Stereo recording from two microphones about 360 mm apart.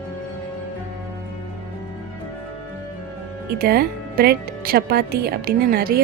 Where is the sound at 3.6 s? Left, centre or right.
Right.